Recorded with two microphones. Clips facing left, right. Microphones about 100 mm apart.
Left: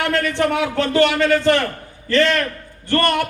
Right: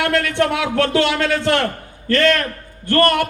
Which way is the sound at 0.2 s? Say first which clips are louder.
Even; 85° right.